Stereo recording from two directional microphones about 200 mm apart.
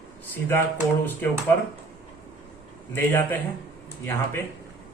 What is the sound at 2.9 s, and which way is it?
Speech, 10° left (ahead or behind).